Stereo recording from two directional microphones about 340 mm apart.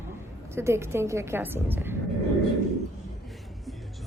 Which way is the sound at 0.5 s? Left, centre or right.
Centre.